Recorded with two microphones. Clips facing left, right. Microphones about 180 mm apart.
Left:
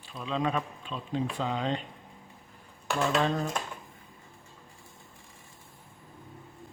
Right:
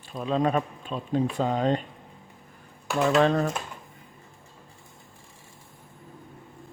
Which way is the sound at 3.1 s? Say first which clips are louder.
Right 8 dB; 70° right (ahead or behind).